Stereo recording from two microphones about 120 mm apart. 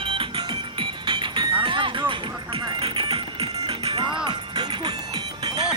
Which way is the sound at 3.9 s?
35° right (ahead or behind).